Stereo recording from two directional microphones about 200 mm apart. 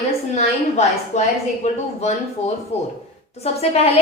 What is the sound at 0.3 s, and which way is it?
A woman's voice, 35° left (ahead or behind).